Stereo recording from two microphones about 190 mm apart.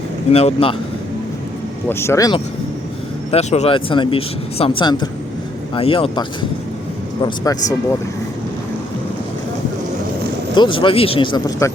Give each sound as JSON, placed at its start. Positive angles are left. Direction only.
{"t": 0.3, "sound": "a man's voice", "side_deg": 30}
{"t": 1.9, "sound": "speech", "side_deg": 15}
{"t": 3.3, "sound": "speech", "side_deg": 35}
{"t": 10.5, "sound": "speech", "side_deg": 25}